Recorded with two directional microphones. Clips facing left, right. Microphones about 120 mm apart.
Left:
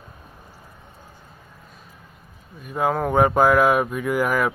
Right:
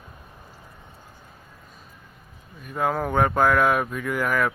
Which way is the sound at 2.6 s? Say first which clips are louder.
Left 3 dB; 5° left (ahead or behind).